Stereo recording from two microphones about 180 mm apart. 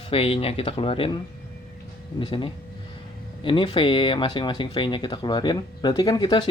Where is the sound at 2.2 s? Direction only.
30° left (ahead or behind).